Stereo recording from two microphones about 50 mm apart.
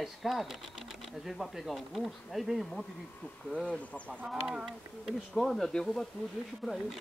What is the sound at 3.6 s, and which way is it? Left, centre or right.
Speech, left.